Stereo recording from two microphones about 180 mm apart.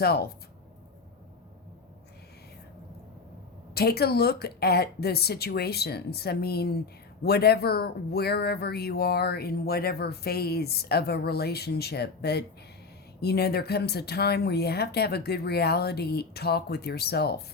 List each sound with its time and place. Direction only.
0.0 s speech: 60° left (ahead or behind)
3.8 s speech: 60° left (ahead or behind)